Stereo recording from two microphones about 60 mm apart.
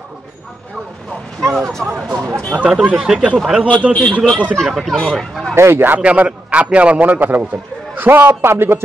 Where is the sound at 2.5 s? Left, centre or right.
Centre.